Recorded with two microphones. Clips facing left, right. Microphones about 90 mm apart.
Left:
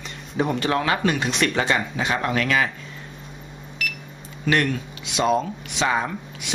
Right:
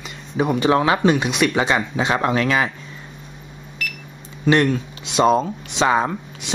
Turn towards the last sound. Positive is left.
turn(degrees=-30)  # may be behind; listen again after turning